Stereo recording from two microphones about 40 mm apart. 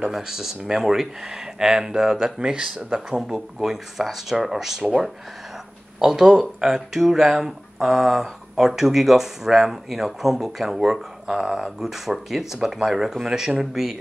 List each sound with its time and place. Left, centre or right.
0.1 s speech: centre
3.3 s speech: centre
5.9 s speech: centre